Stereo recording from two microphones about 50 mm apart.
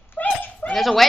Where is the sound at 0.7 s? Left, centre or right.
Centre.